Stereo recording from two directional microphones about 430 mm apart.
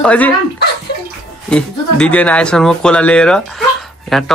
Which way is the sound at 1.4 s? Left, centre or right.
Centre.